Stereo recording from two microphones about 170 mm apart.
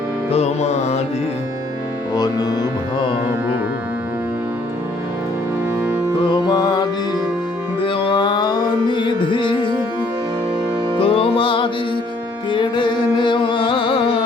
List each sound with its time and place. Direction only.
0.3 s music: 40° left (ahead or behind)
2.1 s music: 25° left (ahead or behind)
6.2 s music: 25° left (ahead or behind)
10.9 s music: 30° left (ahead or behind)